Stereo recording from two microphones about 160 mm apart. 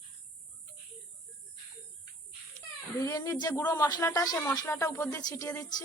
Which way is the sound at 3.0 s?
20° left (ahead or behind).